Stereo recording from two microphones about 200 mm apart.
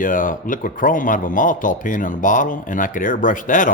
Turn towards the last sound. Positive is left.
turn(degrees=40)  # may be behind; listen again after turning